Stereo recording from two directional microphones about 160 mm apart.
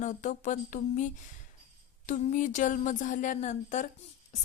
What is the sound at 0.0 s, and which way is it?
A woman's voice, 50° left (ahead or behind).